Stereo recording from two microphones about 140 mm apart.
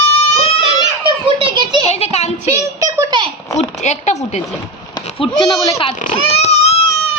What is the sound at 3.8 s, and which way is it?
Speech, 55° left (ahead or behind).